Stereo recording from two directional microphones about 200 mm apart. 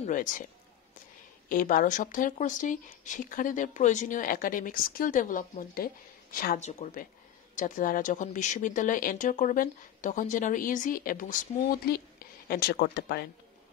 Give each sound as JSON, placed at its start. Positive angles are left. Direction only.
{"t": 0.0, "sound": "speech", "side_deg": 40}
{"t": 1.5, "sound": "speech", "side_deg": 45}